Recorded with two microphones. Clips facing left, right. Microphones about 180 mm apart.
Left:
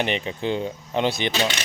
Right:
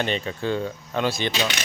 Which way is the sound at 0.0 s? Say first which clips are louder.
Left 1 dB; 20° left (ahead or behind).